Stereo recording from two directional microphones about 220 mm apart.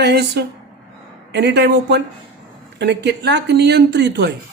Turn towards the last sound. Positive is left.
turn(degrees=-50)  # may be behind; listen again after turning